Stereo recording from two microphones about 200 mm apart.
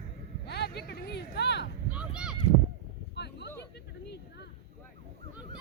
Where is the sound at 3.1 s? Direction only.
60° left (ahead or behind).